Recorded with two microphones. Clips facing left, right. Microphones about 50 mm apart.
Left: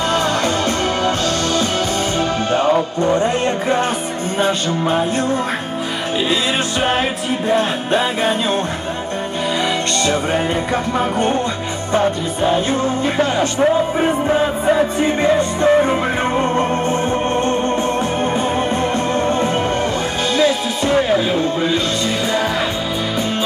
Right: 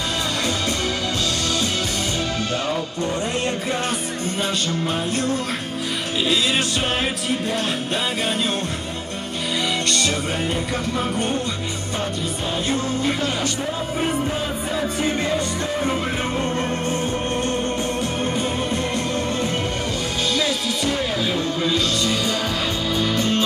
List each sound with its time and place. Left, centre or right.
2.5 s music: left
7.4 s music: left
10.0 s music: left
15.6 s music: left
23.1 s music: centre